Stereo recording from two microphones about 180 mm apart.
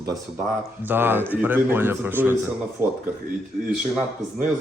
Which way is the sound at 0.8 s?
10° right (ahead or behind).